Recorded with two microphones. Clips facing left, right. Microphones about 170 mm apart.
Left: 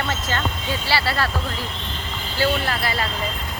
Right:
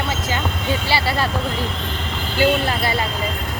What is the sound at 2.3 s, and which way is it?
Speech, 20° right (ahead or behind).